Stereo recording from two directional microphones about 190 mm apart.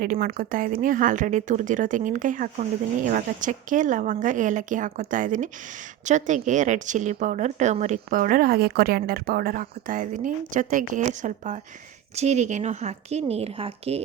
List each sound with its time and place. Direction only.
0.0 s a woman's voice: 45° right (ahead or behind); by 14.0 s 30° right (ahead or behind)